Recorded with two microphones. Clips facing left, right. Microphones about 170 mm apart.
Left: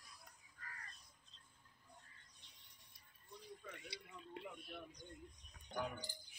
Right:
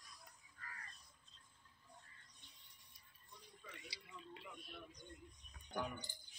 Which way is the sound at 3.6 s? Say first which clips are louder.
Left 4 dB; 55° left (ahead or behind).